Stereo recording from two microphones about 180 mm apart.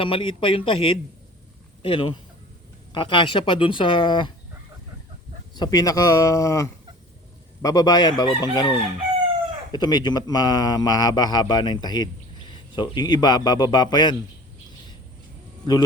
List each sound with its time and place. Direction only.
0.0 s a man's voice: 30° left (ahead or behind)
5.5 s a man's voice: 20° left (ahead or behind)